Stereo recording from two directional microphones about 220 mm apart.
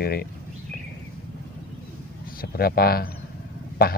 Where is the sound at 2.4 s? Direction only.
45° left (ahead or behind).